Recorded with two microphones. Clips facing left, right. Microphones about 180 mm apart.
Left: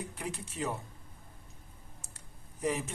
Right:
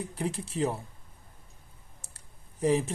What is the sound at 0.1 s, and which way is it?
Speech, 30° right (ahead or behind).